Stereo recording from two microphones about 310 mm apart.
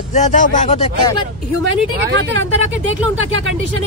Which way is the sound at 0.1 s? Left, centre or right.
Left.